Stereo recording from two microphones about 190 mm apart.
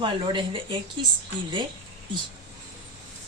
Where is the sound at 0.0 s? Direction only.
25° right (ahead or behind).